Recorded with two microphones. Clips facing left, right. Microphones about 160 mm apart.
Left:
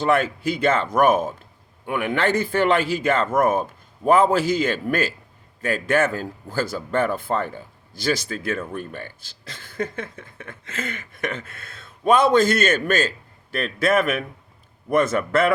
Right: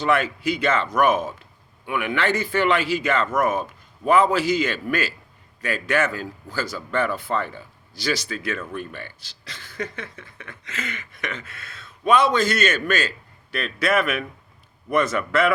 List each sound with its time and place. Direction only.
0.0 s a man's voice: 50° left (ahead or behind)